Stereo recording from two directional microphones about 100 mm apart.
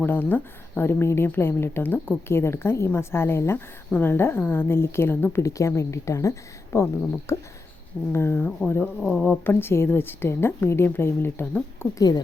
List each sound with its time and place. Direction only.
0.0 s speech: 20° left (ahead or behind)
9.0 s speech: 5° left (ahead or behind)
9.2 s speech: 20° left (ahead or behind)
11.9 s speech: 40° left (ahead or behind)